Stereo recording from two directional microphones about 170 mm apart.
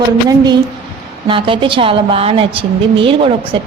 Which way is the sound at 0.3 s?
25° right (ahead or behind).